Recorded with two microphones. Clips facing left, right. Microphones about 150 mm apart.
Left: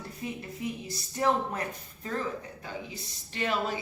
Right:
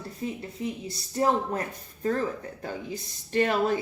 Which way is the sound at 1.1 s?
35° right (ahead or behind).